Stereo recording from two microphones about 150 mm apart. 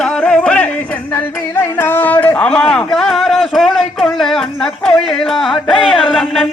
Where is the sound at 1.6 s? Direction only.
15° left (ahead or behind).